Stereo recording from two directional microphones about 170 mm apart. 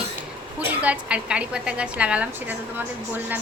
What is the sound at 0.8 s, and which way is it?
A woman's voice, 5° right (ahead or behind).